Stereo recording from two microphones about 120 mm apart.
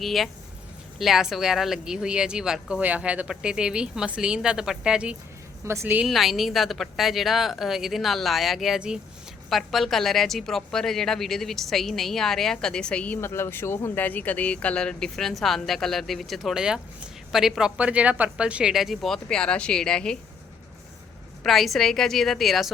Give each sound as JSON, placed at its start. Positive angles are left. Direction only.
{"t": 0.0, "sound": "a woman's voice", "side_deg": 0}
{"t": 5.6, "sound": "a woman's voice", "side_deg": -20}
{"t": 6.1, "sound": "a woman's voice", "side_deg": 0}
{"t": 13.2, "sound": "a woman's voice", "side_deg": 20}
{"t": 21.4, "sound": "a woman's voice", "side_deg": 0}